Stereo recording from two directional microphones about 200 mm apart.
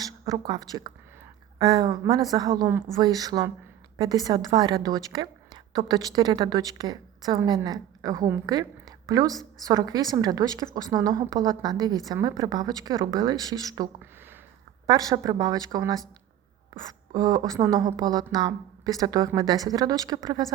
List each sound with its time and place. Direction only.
0.0 s a woman's voice: 20° right (ahead or behind)
17.1 s a woman's voice: 20° right (ahead or behind)